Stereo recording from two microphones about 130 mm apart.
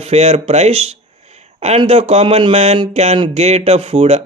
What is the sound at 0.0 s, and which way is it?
Speech, 50° right (ahead or behind).